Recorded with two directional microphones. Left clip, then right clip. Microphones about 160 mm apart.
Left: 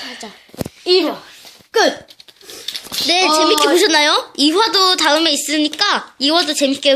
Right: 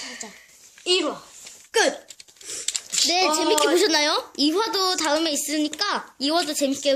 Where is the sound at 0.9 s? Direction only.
50° left (ahead or behind).